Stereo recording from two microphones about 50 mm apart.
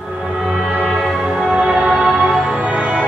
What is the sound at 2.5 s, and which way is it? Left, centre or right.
Music, right.